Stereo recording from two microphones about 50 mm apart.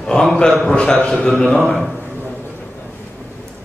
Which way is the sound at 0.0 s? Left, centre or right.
Centre.